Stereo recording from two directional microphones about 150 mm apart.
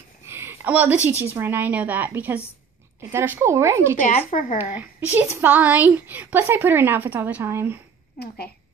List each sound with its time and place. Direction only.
0.3 s a sound: 15° right (ahead or behind)
1.2 s a woman's voice: 15° right (ahead or behind)
4.0 s speech: 65° left (ahead or behind)
5.1 s a woman's voice: 10° right (ahead or behind)